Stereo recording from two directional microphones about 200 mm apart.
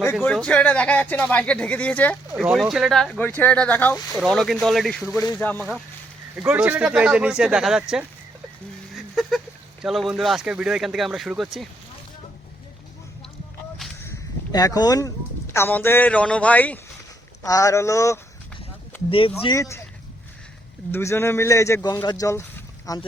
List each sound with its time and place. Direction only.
0.0 s speech: 10° left (ahead or behind)
2.3 s speech: 5° right (ahead or behind)
6.3 s speech: 5° right (ahead or behind)
9.0 s a sound: centre (ahead or behind)
9.8 s speech: centre (ahead or behind)
14.0 s a sound: 15° left (ahead or behind)
15.5 s speech: 10° left (ahead or behind)
19.4 s speech: 20° left (ahead or behind)
20.9 s speech: 15° left (ahead or behind)